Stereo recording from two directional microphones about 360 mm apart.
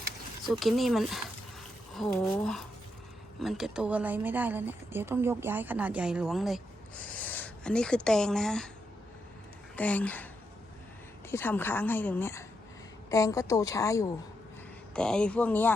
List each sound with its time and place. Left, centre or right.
0.4 s a woman's voice: centre
9.7 s a woman's voice: centre
11.3 s a woman's voice: centre